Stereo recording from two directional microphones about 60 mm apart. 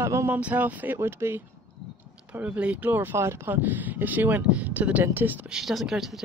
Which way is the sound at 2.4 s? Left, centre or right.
Right.